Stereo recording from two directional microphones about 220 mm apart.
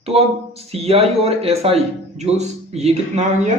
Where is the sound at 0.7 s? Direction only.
25° right (ahead or behind).